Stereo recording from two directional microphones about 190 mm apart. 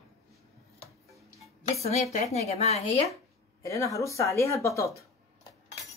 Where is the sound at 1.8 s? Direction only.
35° left (ahead or behind).